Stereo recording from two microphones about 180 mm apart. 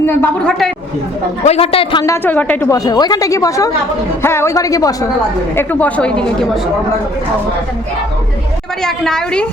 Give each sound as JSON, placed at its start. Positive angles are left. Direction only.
{"t": 0.0, "sound": "a woman's voice", "side_deg": 5}
{"t": 1.5, "sound": "a man's voice", "side_deg": 30}
{"t": 2.0, "sound": "a woman's voice", "side_deg": 10}
{"t": 5.5, "sound": "a woman's voice", "side_deg": 5}
{"t": 8.8, "sound": "a woman's voice", "side_deg": 5}